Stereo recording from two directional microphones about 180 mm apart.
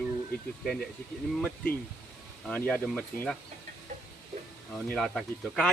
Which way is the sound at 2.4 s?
5° left (ahead or behind).